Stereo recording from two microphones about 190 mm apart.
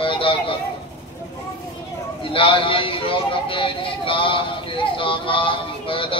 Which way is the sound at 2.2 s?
25° left (ahead or behind).